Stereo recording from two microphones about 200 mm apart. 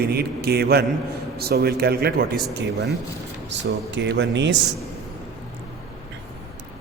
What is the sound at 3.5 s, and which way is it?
A man's voice, 60° right (ahead or behind).